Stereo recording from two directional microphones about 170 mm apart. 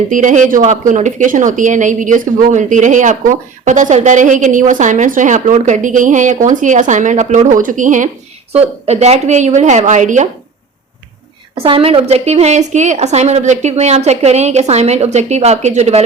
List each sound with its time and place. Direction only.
0.1 s speech: 50° right (ahead or behind)
8.5 s speech: 40° right (ahead or behind)
11.5 s a woman's voice: 30° right (ahead or behind)